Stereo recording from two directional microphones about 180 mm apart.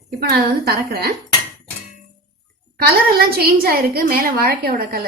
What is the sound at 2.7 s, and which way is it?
A woman's voice, 55° right (ahead or behind).